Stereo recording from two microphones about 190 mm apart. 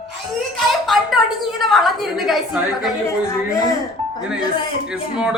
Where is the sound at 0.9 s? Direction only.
Centre (ahead or behind).